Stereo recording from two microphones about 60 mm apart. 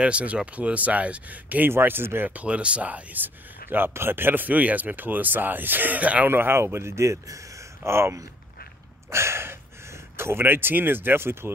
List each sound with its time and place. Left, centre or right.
0.0 s speech: right
1.7 s speech: right
2.3 s speech: centre
6.2 s a man's voice: right